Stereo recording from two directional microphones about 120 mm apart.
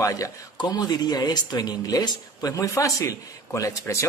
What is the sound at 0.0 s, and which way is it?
A man's voice, 30° left (ahead or behind).